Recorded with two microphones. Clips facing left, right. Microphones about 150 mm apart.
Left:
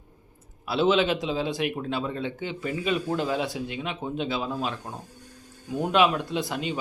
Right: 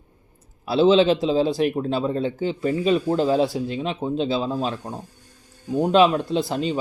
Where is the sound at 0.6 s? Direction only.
30° right (ahead or behind).